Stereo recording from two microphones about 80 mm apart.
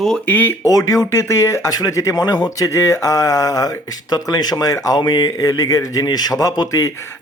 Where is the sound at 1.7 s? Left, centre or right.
Left.